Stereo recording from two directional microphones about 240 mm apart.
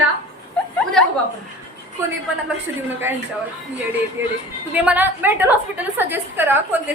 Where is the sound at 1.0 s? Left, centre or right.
Centre.